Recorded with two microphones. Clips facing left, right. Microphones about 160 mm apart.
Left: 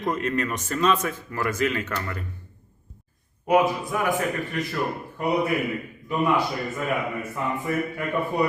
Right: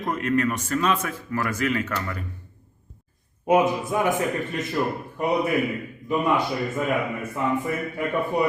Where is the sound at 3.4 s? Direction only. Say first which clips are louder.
Right 1 dB; 20° right (ahead or behind).